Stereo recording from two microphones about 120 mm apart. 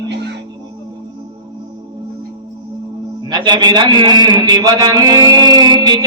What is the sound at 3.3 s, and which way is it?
A man's voice, 35° right (ahead or behind).